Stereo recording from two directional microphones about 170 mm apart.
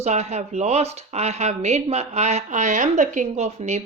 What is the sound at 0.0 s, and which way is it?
Speech, 40° right (ahead or behind).